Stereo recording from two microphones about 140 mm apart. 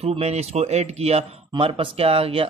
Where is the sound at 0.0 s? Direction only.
45° right (ahead or behind).